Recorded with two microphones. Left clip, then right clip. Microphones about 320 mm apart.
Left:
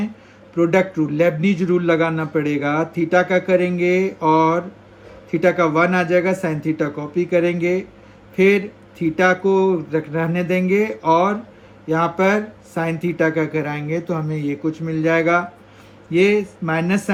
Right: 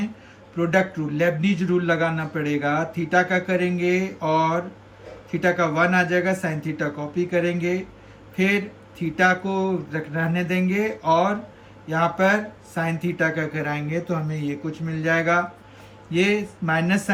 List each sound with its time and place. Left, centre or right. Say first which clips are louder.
0.5 s a man's voice: left 5 dB; centre